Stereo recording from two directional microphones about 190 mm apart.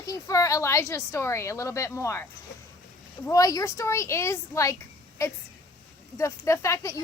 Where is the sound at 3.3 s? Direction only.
20° left (ahead or behind).